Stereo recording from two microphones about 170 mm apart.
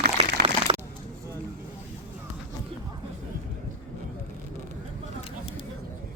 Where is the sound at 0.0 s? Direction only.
75° right (ahead or behind).